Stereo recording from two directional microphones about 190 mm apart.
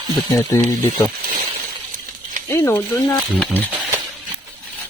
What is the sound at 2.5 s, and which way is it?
Speech, 15° left (ahead or behind).